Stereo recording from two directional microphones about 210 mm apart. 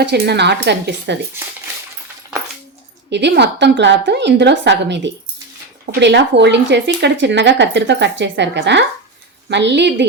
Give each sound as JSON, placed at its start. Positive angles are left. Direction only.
{"t": 0.0, "sound": "speech", "side_deg": -55}
{"t": 3.1, "sound": "speech", "side_deg": -55}